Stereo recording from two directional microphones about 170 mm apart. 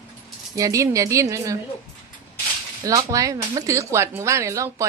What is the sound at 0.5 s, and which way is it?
Speech, 20° right (ahead or behind).